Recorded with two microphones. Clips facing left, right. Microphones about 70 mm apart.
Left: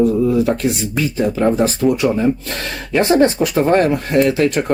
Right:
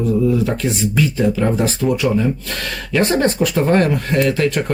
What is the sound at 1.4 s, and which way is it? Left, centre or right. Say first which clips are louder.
Speech: left 3 dB; centre.